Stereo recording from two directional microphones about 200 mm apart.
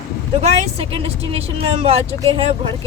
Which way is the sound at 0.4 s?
35° right (ahead or behind).